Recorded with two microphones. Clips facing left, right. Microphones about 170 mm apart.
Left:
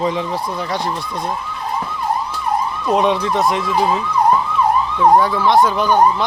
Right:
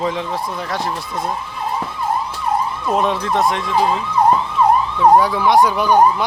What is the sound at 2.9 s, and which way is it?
Speech, centre (ahead or behind).